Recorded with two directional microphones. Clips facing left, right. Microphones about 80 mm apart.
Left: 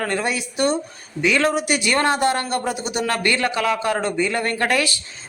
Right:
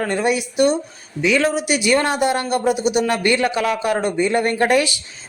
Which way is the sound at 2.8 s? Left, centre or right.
Left.